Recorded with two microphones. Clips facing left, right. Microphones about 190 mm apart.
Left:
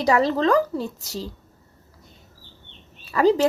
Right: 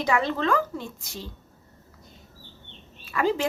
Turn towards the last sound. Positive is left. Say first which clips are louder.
# left 7 dB
turn(degrees=35)  # may be behind; listen again after turning